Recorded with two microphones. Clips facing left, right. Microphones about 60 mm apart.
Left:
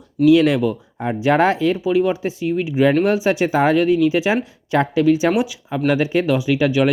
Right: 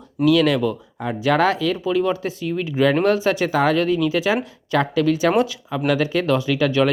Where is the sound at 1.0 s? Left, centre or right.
Left.